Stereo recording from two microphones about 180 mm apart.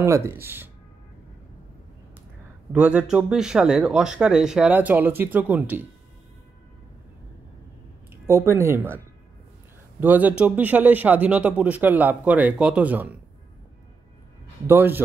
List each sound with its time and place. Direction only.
0.0 s a man's voice: 15° right (ahead or behind)
2.7 s speech: 5° right (ahead or behind)
8.3 s a man's voice: 15° right (ahead or behind)
14.7 s a man's voice: 10° right (ahead or behind)